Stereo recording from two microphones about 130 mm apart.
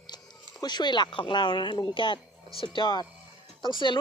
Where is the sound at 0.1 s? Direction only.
30° left (ahead or behind).